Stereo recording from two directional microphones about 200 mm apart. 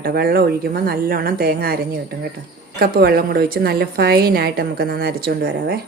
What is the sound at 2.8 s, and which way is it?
A woman's voice, 50° right (ahead or behind).